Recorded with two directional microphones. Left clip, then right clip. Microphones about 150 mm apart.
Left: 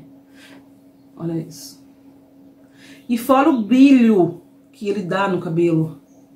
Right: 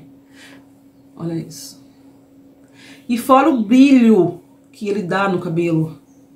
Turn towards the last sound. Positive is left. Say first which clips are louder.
# even
turn(degrees=-10)  # may be behind; listen again after turning